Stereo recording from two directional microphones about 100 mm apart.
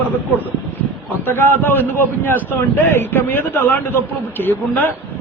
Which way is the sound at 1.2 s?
20° left (ahead or behind).